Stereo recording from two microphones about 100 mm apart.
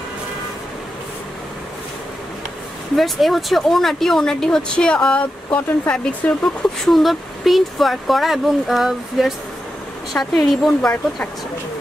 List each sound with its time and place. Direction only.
3.0 s speech: centre (ahead or behind)
10.1 s speech: 20° left (ahead or behind)
10.5 s speech: centre (ahead or behind)